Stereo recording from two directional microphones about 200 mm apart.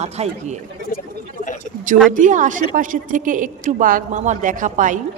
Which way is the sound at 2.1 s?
40° right (ahead or behind).